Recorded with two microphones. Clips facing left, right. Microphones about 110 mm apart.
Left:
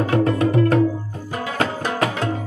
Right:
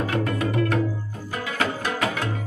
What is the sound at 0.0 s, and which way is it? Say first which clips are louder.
Tabla: left 6 dB; 30° left (ahead or behind).